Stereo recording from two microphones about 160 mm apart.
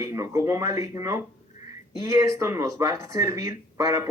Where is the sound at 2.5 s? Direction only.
20° right (ahead or behind).